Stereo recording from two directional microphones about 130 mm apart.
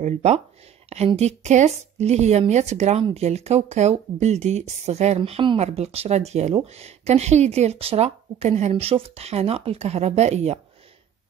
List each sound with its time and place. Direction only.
0.0 s a woman's voice: 60° right (ahead or behind)